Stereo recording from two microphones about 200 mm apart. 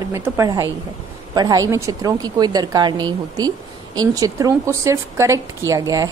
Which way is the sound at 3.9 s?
15° right (ahead or behind).